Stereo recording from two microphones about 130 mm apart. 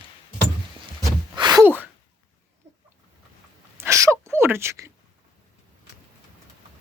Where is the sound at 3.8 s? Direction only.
25° right (ahead or behind).